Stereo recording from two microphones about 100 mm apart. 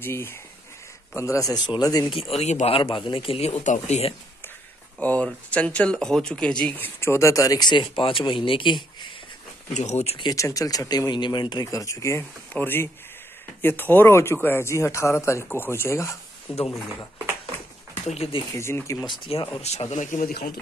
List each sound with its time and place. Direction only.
0.0 s speech: 20° left (ahead or behind); by 2.0 s 40° left (ahead or behind)
2.0 s a man's voice: 65° left (ahead or behind); by 4.1 s 90° left
5.0 s speech: 15° left (ahead or behind)
7.0 s speech: 30° left (ahead or behind); by 9.1 s 55° left (ahead or behind)
9.9 s speech: 90° left
10.3 s speech: 35° left (ahead or behind); by 11.6 s 50° left (ahead or behind)
11.6 s speech: 35° left (ahead or behind)
16.5 s a man's voice: 70° left (ahead or behind)
18.0 s speech: 90° left
18.5 s speech: 25° left (ahead or behind)
19.3 s speech: 80° left
19.6 s speech: 90° left